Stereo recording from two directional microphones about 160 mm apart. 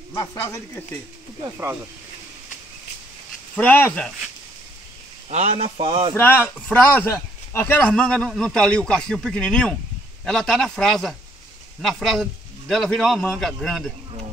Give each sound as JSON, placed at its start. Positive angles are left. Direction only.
{"t": 0.1, "sound": "speech", "side_deg": 25}
{"t": 3.5, "sound": "speech", "side_deg": 10}
{"t": 5.3, "sound": "speech", "side_deg": -40}
{"t": 6.1, "sound": "speech", "side_deg": 10}